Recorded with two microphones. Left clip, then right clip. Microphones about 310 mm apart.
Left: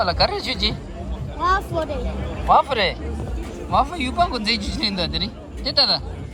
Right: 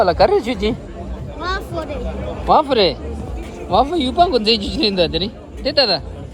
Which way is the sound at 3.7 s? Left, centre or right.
Left.